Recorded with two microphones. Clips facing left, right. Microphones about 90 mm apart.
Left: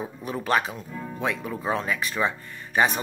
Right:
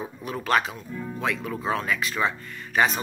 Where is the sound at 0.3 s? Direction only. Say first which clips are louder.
Even; 20° left (ahead or behind).